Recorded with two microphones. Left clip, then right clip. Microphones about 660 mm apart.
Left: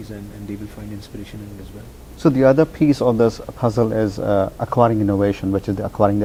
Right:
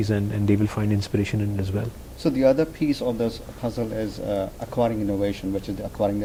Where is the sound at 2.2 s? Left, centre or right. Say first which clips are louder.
Left 6 dB; left.